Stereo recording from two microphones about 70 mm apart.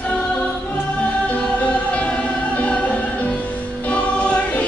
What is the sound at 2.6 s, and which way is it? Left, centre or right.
Music, centre.